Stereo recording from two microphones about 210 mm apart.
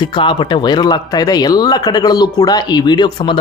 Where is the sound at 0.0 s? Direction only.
25° left (ahead or behind).